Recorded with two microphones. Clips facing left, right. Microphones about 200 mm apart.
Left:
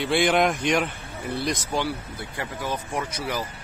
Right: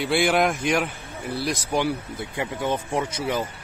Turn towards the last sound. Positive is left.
turn(degrees=-25)  # may be behind; listen again after turning